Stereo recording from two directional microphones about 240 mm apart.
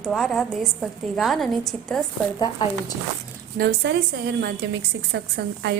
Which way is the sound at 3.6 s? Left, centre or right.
Right.